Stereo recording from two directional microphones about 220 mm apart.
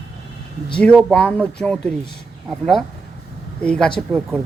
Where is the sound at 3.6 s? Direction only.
5° left (ahead or behind).